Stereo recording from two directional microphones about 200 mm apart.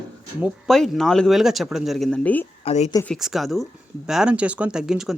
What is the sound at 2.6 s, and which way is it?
Speech, 30° left (ahead or behind).